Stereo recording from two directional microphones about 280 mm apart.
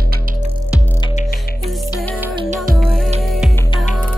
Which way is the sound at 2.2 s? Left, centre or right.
Centre.